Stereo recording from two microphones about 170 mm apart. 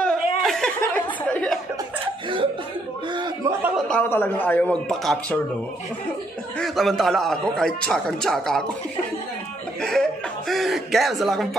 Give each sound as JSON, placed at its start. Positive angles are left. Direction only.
{"t": 0.0, "sound": "chuckle", "side_deg": 0}
{"t": 1.3, "sound": "speech", "side_deg": 5}
{"t": 3.1, "sound": "speech", "side_deg": -25}
{"t": 3.9, "sound": "a man's voice", "side_deg": 10}
{"t": 6.6, "sound": "a man's voice", "side_deg": 0}
{"t": 9.8, "sound": "a man's voice", "side_deg": 5}